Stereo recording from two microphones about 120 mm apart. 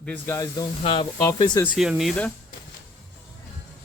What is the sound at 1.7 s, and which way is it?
Speech, 5° right (ahead or behind).